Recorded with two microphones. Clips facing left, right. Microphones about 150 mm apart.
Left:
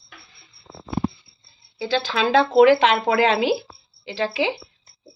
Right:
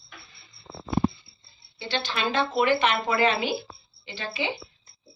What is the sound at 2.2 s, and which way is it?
Speech, 90° left.